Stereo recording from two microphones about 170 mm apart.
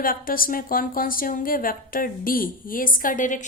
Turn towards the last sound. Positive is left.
turn(degrees=50)  # may be behind; listen again after turning